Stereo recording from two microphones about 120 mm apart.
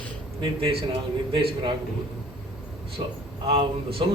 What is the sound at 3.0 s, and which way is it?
A man's voice, 55° right (ahead or behind).